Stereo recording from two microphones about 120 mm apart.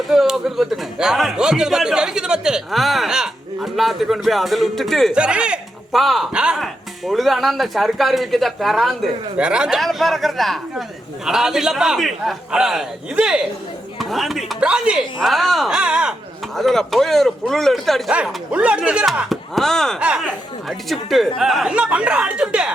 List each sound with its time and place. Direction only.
0.1 s speech: centre (ahead or behind)
5.1 s speech: 10° right (ahead or behind)
16.6 s speech: centre (ahead or behind)
18.5 s speech: 10° right (ahead or behind)
20.0 s speech: 10° right (ahead or behind)